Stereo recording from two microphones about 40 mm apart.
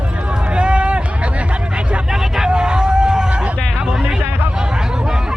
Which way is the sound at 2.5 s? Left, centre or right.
Right.